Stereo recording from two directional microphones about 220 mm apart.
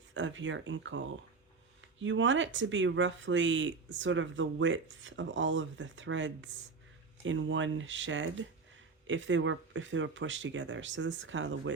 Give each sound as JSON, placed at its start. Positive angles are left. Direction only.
{"t": 0.1, "sound": "speech", "side_deg": -60}